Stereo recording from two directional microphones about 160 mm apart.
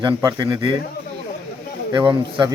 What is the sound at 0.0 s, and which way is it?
Speech, 25° right (ahead or behind).